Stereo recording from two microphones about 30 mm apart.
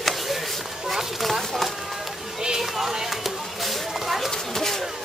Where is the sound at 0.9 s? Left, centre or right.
Centre.